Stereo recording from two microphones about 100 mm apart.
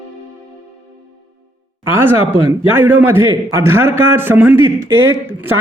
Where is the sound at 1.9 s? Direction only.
25° right (ahead or behind).